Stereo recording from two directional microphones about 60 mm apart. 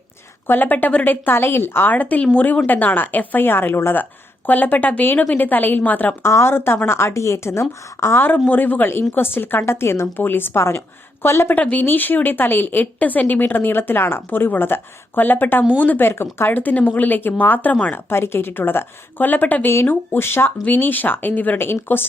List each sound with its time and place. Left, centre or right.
0.4 s a woman's voice: left
6.2 s a woman's voice: left
11.5 s a woman's voice: left
17.9 s a woman's voice: left
19.7 s a woman's voice: left